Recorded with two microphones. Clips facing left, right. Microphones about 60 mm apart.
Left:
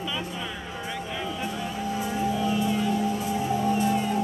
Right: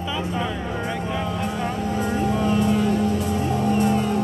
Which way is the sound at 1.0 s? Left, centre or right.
Right.